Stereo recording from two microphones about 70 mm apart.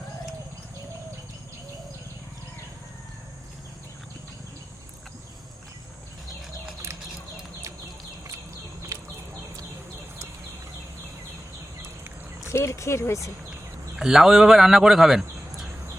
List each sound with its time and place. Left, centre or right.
8.9 s a sound: right
12.5 s speech: left
14.0 s speech: centre